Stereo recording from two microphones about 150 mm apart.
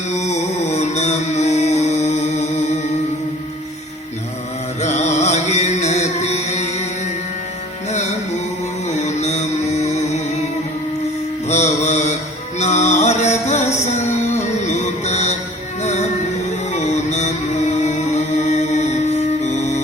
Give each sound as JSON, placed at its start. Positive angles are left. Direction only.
{"t": 0.1, "sound": "music", "side_deg": 45}
{"t": 4.8, "sound": "music", "side_deg": 50}
{"t": 7.9, "sound": "music", "side_deg": 50}
{"t": 11.4, "sound": "mantra", "side_deg": 50}
{"t": 12.5, "sound": "music", "side_deg": 50}